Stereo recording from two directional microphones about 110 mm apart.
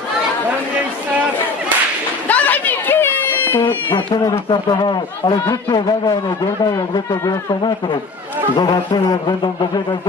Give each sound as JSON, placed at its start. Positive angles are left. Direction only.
{"t": 2.2, "sound": "chatter", "side_deg": 15}
{"t": 4.5, "sound": "a man's voice", "side_deg": 40}
{"t": 8.5, "sound": "a man's voice", "side_deg": 40}